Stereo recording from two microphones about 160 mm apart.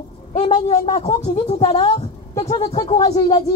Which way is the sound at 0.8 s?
35° left (ahead or behind).